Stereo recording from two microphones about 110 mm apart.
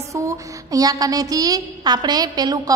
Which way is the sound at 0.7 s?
35° right (ahead or behind).